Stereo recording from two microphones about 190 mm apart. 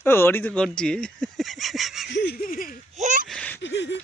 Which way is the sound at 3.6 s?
70° left (ahead or behind).